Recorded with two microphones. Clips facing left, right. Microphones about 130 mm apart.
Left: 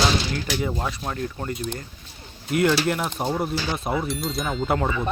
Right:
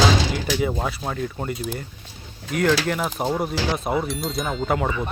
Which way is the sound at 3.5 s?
90° right.